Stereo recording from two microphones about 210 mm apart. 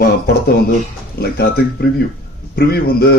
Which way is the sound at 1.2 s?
45° left (ahead or behind).